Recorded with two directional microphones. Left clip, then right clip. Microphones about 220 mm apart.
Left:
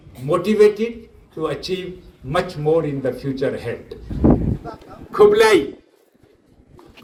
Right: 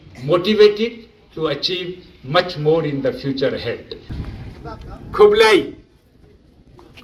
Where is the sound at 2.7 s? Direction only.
50° left (ahead or behind).